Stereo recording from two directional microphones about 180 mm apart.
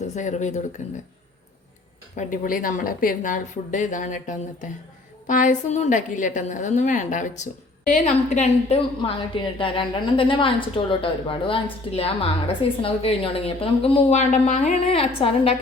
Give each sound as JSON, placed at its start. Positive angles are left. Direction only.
{"t": 0.1, "sound": "a woman's voice", "side_deg": 40}
{"t": 2.1, "sound": "a woman's voice", "side_deg": 50}
{"t": 9.0, "sound": "a woman's voice", "side_deg": 30}